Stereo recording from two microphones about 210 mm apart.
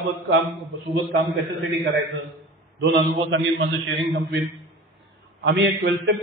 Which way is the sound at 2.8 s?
60° right (ahead or behind).